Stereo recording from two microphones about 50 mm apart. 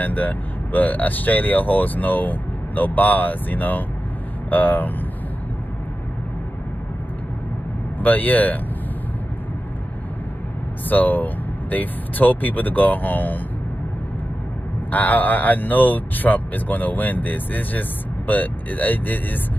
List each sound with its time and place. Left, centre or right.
0.0 s speech: left
8.0 s speech: left
10.9 s speech: left
14.9 s speech: left